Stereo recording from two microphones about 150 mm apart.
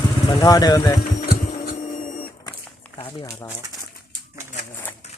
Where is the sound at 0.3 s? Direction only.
25° left (ahead or behind).